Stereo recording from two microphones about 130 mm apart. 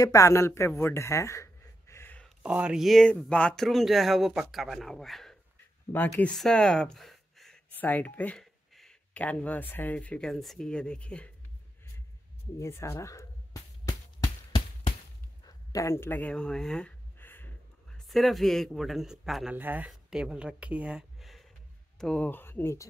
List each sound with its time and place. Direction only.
0.0 s speech: 25° left (ahead or behind)
2.2 s speech: 5° right (ahead or behind)
7.7 s speech: 15° left (ahead or behind)
12.5 s a sound: 20° left (ahead or behind)
15.4 s speech: 25° left (ahead or behind); by 16.9 s 5° left (ahead or behind)
17.2 s a sound: 15° left (ahead or behind)
17.9 s speech: centre (ahead or behind)
19.5 s speech: 15° right (ahead or behind); by 22.8 s 20° left (ahead or behind)